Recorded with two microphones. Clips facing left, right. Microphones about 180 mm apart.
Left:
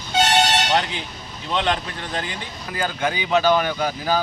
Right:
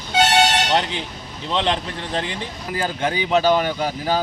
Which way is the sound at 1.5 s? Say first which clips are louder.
Right 1 dB; 30° right (ahead or behind).